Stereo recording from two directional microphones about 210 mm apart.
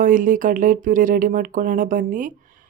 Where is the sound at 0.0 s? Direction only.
40° right (ahead or behind).